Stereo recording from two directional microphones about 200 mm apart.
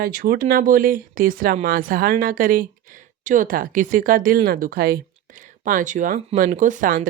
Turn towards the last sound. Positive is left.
turn(degrees=-40)  # may be behind; listen again after turning